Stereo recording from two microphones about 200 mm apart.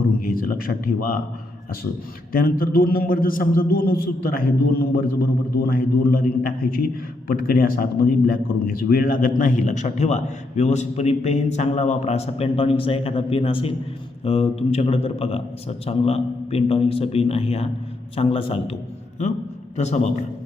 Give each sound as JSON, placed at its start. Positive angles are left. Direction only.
{"t": 0.0, "sound": "speech", "side_deg": 45}
{"t": 2.3, "sound": "a man's voice", "side_deg": 45}
{"t": 7.3, "sound": "a man's voice", "side_deg": 45}